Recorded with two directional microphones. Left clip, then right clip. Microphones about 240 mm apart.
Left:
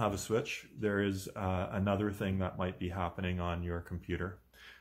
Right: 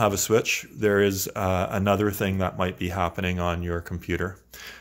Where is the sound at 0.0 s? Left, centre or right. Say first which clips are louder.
Right 12 dB; right.